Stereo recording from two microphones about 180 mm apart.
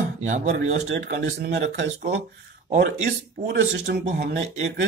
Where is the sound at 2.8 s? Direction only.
65° right (ahead or behind).